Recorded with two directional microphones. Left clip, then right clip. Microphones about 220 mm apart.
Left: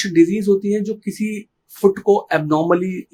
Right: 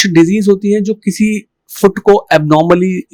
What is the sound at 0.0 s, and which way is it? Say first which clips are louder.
Speech: right 6 dB; 40° right (ahead or behind).